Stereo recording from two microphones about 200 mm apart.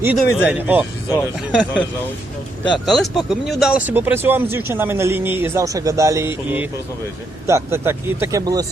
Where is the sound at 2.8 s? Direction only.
Centre (ahead or behind).